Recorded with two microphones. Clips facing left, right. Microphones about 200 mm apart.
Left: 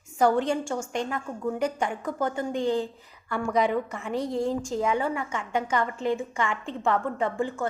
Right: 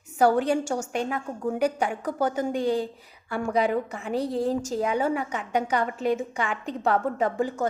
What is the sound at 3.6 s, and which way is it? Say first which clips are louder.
Speech: right 1 dB; centre (ahead or behind).